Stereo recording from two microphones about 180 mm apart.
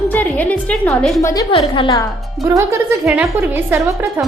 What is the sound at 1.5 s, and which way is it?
Speech, 25° left (ahead or behind).